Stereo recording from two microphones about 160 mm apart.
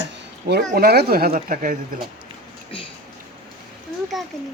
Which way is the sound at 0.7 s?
75° right (ahead or behind).